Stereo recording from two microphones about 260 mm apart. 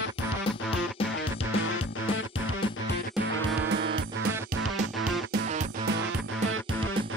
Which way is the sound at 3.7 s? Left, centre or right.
Right.